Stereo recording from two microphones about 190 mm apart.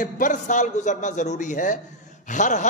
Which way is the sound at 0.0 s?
40° left (ahead or behind).